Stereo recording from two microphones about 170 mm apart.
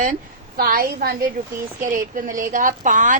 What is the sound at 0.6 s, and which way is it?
Speech, 60° right (ahead or behind).